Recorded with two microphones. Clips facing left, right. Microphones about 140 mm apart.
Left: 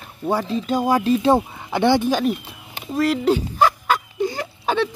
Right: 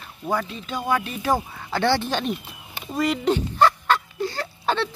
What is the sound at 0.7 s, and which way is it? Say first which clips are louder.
Speech: left 8 dB; 40° left (ahead or behind).